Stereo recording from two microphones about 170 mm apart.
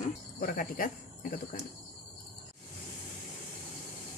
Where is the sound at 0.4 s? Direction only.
55° left (ahead or behind).